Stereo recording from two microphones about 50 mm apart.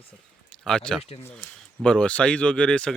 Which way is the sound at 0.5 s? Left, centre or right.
Centre.